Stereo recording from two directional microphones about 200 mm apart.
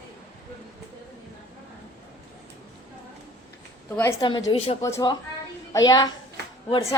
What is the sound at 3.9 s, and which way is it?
A woman's voice, 15° left (ahead or behind).